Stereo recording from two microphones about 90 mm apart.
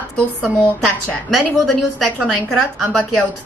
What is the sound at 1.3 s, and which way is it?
A woman's voice, centre (ahead or behind).